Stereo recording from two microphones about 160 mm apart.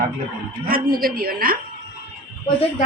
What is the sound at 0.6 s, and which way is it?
Speech, 65° right (ahead or behind).